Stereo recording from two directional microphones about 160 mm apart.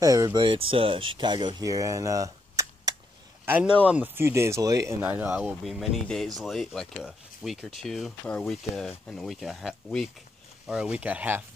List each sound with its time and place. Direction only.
0.0 s speech: 20° right (ahead or behind)
3.4 s speech: 10° right (ahead or behind)
5.0 s speech: 10° right (ahead or behind)